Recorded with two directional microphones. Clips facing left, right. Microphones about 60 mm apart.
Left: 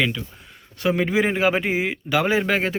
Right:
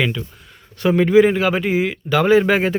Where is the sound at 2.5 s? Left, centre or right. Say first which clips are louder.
Right 5 dB; centre.